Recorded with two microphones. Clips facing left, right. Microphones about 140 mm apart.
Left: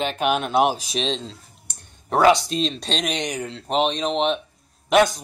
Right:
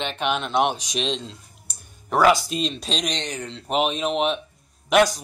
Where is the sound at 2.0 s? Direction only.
25° left (ahead or behind).